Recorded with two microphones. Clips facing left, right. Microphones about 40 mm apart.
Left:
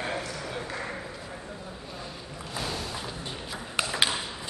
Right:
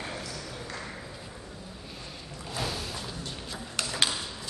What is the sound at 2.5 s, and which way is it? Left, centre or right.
Boat, centre.